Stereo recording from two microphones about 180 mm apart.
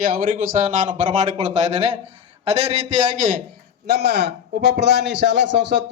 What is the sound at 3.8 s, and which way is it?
A man's voice, 65° right (ahead or behind).